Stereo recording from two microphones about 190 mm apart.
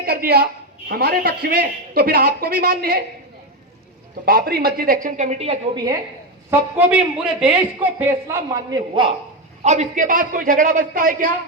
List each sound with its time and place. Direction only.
0.0 s a man's voice: 50° right (ahead or behind)
4.3 s a man's voice: 50° right (ahead or behind); by 5.5 s 35° right (ahead or behind)
6.5 s a man's voice: 10° right (ahead or behind)
9.6 s a man's voice: 40° right (ahead or behind)